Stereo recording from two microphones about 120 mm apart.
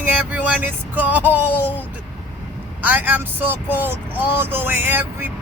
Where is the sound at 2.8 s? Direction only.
15° right (ahead or behind).